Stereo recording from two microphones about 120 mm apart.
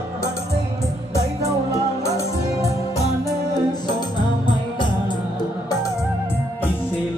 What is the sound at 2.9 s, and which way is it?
Music, 30° left (ahead or behind).